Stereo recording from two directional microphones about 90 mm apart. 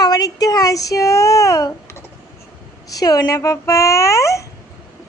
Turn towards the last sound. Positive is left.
turn(degrees=35)  # may be behind; listen again after turning